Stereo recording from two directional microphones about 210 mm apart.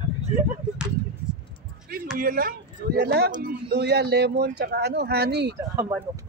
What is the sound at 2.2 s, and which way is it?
A man's voice, 45° right (ahead or behind).